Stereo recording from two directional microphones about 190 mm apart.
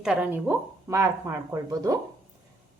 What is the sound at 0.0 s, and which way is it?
A woman's voice, 5° right (ahead or behind).